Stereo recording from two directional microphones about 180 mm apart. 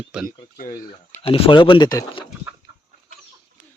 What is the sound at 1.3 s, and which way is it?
Speech, 30° left (ahead or behind).